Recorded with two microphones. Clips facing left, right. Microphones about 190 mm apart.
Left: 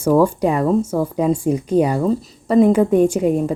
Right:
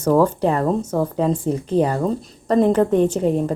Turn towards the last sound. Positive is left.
turn(degrees=10)  # may be behind; listen again after turning